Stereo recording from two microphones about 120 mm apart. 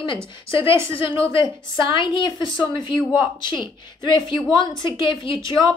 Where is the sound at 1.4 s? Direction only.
40° left (ahead or behind).